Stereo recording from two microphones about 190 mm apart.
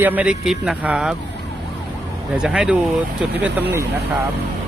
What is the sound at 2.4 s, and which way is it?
Speech, 5° right (ahead or behind).